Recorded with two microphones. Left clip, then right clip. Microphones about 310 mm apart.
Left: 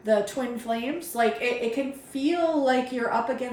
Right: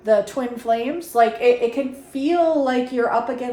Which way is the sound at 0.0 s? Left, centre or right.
Centre.